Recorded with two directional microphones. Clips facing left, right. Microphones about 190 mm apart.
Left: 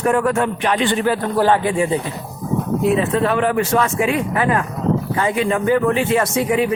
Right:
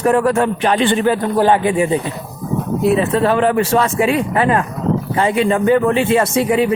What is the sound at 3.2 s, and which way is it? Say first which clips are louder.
Speech: right 3 dB; 35° right (ahead or behind).